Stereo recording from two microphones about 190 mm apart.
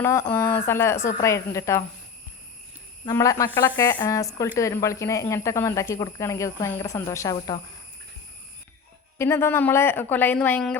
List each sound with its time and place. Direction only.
0.0 s speech: 10° left (ahead or behind)
3.1 s speech: 15° left (ahead or behind)
9.1 s speech: 15° left (ahead or behind)